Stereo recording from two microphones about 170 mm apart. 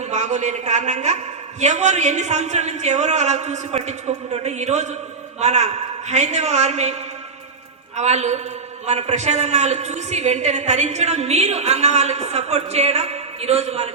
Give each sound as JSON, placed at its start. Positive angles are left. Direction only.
{"t": 0.0, "sound": "a man's voice", "side_deg": -45}
{"t": 7.9, "sound": "a woman's voice", "side_deg": -40}